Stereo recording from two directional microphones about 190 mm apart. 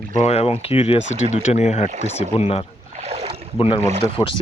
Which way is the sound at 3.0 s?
30° right (ahead or behind).